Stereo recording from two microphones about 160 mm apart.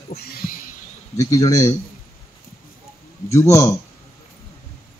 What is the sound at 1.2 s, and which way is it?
Speech, 20° left (ahead or behind).